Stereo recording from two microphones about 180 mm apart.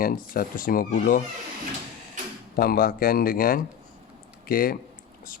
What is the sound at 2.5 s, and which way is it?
Speech, 55° left (ahead or behind).